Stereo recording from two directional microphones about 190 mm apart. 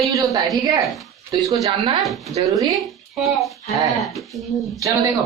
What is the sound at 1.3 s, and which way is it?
Speech, 15° right (ahead or behind).